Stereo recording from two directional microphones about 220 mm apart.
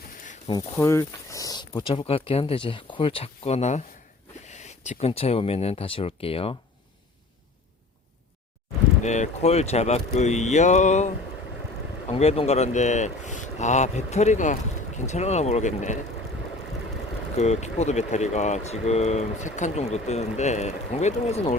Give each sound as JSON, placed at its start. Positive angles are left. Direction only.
{"t": 0.4, "sound": "speech", "side_deg": 15}
{"t": 9.0, "sound": "speech", "side_deg": 30}
{"t": 12.1, "sound": "speech", "side_deg": 25}
{"t": 17.3, "sound": "speech", "side_deg": 30}